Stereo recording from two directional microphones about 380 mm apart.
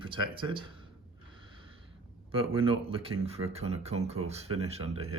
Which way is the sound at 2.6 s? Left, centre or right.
Centre.